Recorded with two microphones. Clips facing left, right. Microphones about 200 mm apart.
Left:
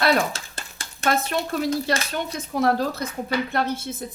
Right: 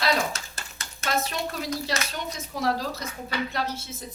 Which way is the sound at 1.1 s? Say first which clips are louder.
Left 5 dB; 60° left (ahead or behind).